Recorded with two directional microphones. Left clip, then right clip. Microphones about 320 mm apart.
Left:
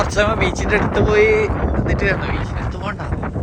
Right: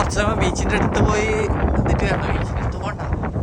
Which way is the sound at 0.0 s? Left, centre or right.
Centre.